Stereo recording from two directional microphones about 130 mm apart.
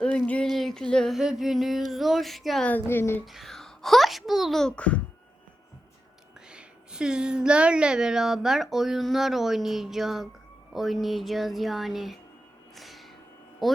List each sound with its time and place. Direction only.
0.5 s a woman's voice: centre (ahead or behind)
2.6 s speech: 15° left (ahead or behind)
3.2 s a woman's voice: centre (ahead or behind)
6.5 s a woman's voice: 5° right (ahead or behind)
12.7 s a sound: centre (ahead or behind)
13.6 s speech: centre (ahead or behind)